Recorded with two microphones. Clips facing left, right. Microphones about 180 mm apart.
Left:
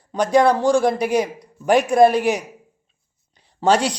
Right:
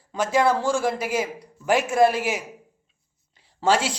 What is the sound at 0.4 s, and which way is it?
A man's voice, 20° left (ahead or behind).